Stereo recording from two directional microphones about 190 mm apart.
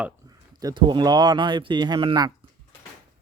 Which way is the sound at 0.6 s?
25° right (ahead or behind).